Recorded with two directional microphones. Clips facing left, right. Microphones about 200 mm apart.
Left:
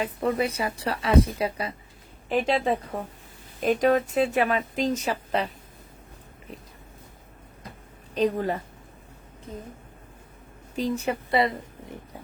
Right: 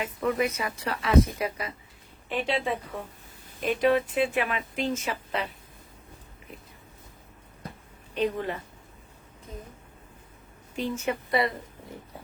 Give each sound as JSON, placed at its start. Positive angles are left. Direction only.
{"t": 0.0, "sound": "speech", "side_deg": 30}
{"t": 2.3, "sound": "speech", "side_deg": 40}
{"t": 8.1, "sound": "a woman's voice", "side_deg": 40}
{"t": 10.8, "sound": "speech", "side_deg": 35}